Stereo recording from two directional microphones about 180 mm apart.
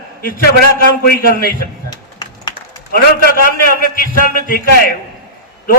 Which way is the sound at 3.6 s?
50° left (ahead or behind).